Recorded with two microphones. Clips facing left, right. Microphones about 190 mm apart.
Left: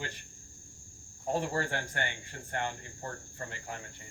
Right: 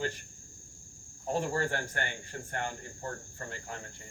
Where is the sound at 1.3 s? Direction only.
45° right (ahead or behind).